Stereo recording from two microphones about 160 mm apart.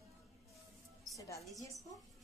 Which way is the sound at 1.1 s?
20° left (ahead or behind).